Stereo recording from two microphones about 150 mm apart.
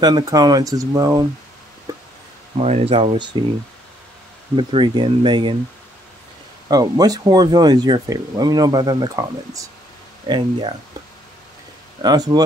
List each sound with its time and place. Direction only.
0.0 s speech: 30° right (ahead or behind)
2.5 s speech: 45° right (ahead or behind)
4.6 s speech: 35° right (ahead or behind)
6.7 s speech: 25° right (ahead or behind)
12.0 s speech: 25° right (ahead or behind)